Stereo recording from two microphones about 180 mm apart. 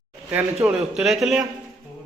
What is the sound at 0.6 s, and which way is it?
Speech, 5° right (ahead or behind).